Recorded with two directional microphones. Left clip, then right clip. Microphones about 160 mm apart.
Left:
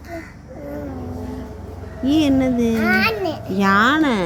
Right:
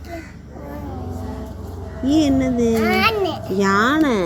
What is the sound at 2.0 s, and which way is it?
A child's voice, 20° left (ahead or behind).